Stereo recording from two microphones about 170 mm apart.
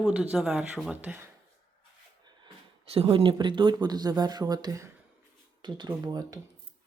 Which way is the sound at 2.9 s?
35° right (ahead or behind).